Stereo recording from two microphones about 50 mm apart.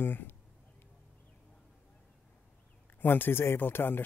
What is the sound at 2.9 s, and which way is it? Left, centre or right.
Speech, left.